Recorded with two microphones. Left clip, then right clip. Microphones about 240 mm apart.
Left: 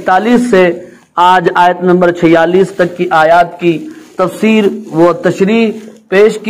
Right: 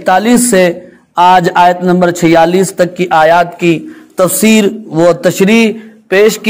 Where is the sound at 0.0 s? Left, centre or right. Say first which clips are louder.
Even; right.